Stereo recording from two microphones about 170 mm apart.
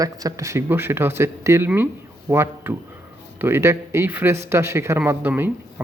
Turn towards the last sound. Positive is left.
turn(degrees=-10)  # may be behind; listen again after turning